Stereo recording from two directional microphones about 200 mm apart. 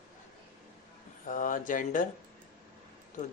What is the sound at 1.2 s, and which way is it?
Speech, 40° left (ahead or behind).